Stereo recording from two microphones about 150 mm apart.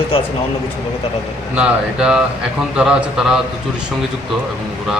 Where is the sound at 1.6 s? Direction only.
5° right (ahead or behind).